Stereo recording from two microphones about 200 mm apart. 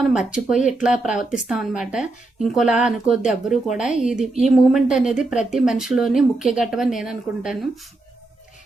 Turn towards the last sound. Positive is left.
turn(degrees=0)  # may be behind; listen again after turning